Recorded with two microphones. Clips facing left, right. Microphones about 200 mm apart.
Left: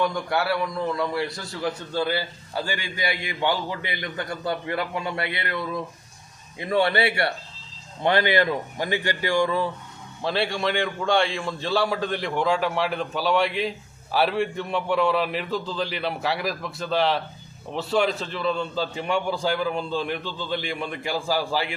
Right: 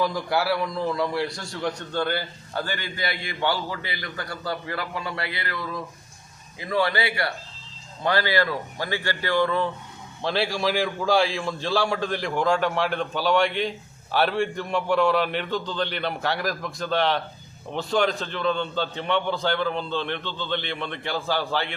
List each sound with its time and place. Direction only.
0.0 s a man's voice: centre (ahead or behind)
10.2 s a man's voice: centre (ahead or behind)